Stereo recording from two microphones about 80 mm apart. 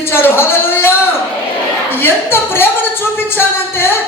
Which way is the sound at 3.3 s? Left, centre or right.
Left.